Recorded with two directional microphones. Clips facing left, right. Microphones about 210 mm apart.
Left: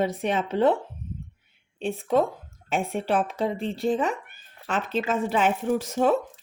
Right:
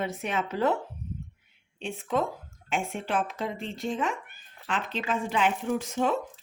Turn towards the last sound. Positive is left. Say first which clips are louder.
# left 5 dB
turn(degrees=40)  # may be behind; listen again after turning